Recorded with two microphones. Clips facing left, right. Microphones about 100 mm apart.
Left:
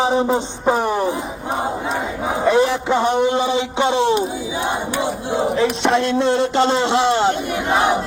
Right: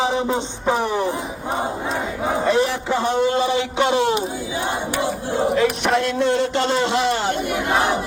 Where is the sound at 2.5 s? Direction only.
20° left (ahead or behind).